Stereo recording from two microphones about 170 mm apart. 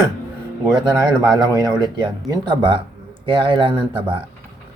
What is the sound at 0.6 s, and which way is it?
Speech, 25° right (ahead or behind).